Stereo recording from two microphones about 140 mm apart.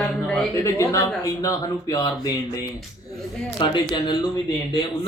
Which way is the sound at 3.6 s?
35° left (ahead or behind).